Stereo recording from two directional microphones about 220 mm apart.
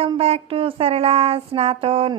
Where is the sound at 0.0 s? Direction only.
25° right (ahead or behind).